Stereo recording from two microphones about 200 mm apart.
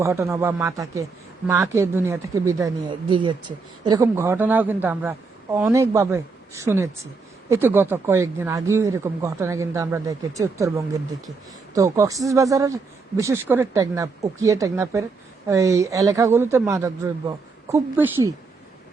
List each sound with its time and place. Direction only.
0.0 s speech: 15° right (ahead or behind)